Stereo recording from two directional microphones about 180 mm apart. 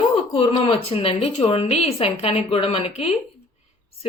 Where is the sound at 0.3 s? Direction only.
30° left (ahead or behind).